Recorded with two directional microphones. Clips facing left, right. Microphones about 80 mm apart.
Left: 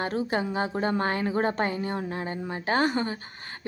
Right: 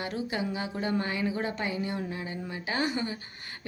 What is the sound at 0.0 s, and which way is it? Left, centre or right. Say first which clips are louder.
A woman's voice: left 5 dB; left.